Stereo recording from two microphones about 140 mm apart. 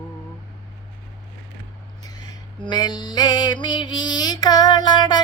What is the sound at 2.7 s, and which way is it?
Music, 30° left (ahead or behind).